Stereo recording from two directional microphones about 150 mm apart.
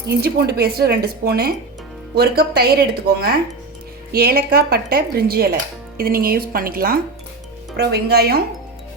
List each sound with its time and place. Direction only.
0.1 s speech: 90° right
7.8 s speech: 90° right